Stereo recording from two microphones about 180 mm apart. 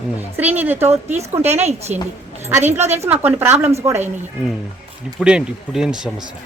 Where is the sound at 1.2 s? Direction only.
35° right (ahead or behind).